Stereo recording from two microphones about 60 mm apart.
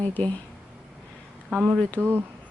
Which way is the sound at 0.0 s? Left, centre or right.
Left.